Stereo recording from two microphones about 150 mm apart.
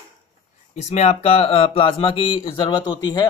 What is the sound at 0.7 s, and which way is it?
Speech, 50° left (ahead or behind).